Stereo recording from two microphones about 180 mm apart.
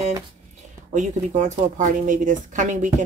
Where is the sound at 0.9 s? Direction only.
45° right (ahead or behind).